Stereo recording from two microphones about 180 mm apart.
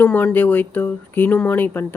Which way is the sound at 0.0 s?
10° left (ahead or behind).